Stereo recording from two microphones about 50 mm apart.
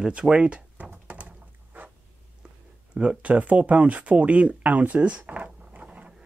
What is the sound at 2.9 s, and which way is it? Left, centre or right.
Speech, centre.